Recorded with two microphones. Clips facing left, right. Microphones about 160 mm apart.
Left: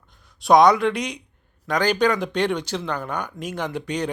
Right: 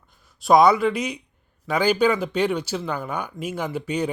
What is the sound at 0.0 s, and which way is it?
Speech, 5° right (ahead or behind).